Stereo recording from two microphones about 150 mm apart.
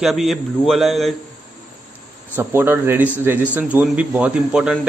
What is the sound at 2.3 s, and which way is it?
Speech, 15° right (ahead or behind).